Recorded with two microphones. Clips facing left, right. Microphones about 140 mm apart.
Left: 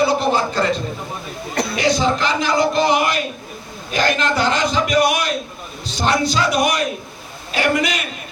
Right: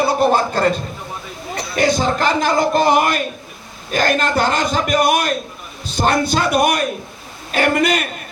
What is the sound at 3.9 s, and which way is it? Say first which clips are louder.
A man's voice: right 2 dB; 50° right (ahead or behind).